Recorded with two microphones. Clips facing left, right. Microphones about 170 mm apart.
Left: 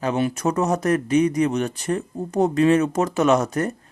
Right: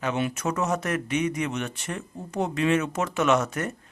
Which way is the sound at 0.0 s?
35° left (ahead or behind).